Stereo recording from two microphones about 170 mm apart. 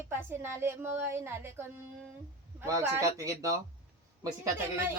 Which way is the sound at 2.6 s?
20° right (ahead or behind).